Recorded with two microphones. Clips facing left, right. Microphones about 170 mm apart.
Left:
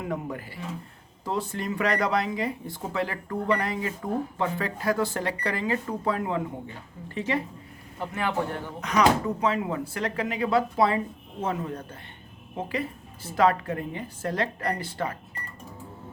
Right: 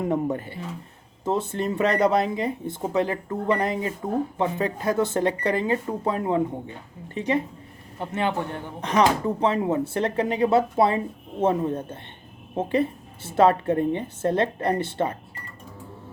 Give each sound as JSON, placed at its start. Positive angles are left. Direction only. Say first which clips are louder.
{"t": 0.0, "sound": "speech", "louder": "right 7 dB", "side_deg": -30}